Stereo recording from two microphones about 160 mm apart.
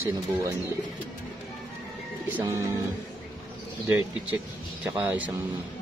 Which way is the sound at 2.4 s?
20° right (ahead or behind).